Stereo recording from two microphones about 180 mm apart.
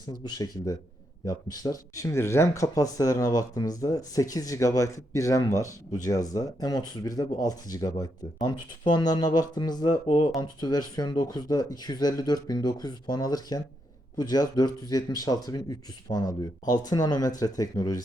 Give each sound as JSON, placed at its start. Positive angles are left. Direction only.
{"t": 0.3, "sound": "speech", "side_deg": 20}